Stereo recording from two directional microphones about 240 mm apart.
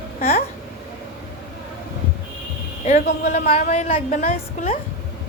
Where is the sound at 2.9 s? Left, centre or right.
Left.